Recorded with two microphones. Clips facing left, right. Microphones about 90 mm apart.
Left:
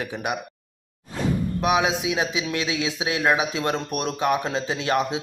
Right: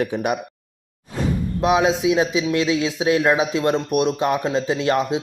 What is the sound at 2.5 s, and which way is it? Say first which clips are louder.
Speech: right 7 dB; 30° right (ahead or behind).